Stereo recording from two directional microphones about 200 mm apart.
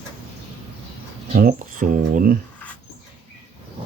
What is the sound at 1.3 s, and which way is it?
Speech, 45° right (ahead or behind).